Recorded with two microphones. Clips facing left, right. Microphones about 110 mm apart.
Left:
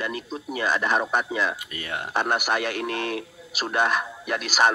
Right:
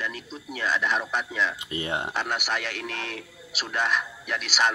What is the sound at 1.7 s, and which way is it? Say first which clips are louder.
Speech: right 3 dB; 20° right (ahead or behind).